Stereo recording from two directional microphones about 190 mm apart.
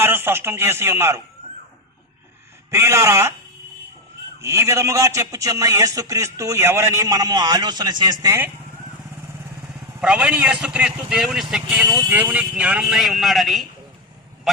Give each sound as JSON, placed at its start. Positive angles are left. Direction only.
{"t": 0.0, "sound": "a man's voice", "side_deg": -10}
{"t": 2.6, "sound": "a man's voice", "side_deg": -15}
{"t": 4.4, "sound": "a man's voice", "side_deg": -15}
{"t": 10.0, "sound": "speech", "side_deg": -5}